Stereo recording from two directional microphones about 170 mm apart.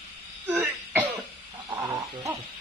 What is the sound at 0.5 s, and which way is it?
Throat clearing, 10° right (ahead or behind).